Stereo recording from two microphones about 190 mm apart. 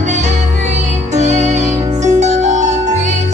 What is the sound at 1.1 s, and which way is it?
Music, 35° right (ahead or behind).